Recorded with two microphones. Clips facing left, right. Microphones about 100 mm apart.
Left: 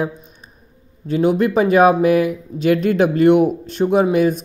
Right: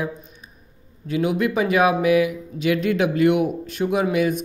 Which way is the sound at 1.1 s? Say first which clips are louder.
Left 5 dB; 35° left (ahead or behind).